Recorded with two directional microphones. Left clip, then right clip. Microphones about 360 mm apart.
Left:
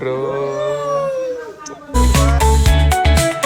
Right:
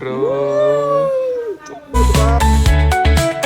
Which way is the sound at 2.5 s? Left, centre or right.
Centre.